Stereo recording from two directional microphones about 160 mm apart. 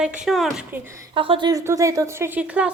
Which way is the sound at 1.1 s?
30° right (ahead or behind).